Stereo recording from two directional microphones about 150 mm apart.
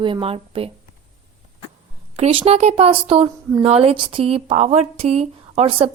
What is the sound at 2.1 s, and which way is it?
A woman's voice, 40° right (ahead or behind).